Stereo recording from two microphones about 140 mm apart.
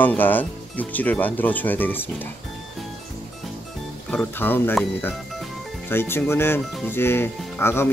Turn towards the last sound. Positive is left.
turn(degrees=15)  # may be behind; listen again after turning